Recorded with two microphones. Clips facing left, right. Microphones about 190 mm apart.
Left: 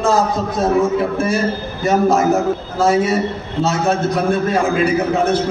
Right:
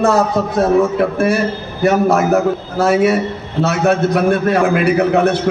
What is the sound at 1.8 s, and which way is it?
A man's voice, 65° right (ahead or behind).